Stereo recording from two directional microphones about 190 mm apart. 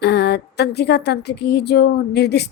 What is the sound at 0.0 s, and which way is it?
A woman's voice, 60° left (ahead or behind).